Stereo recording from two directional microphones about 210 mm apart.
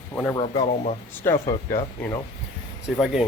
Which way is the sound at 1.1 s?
10° left (ahead or behind).